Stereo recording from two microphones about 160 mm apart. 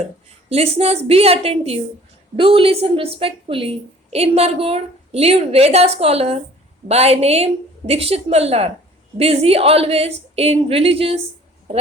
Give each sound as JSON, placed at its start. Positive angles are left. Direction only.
{"t": 0.5, "sound": "a woman's voice", "side_deg": -40}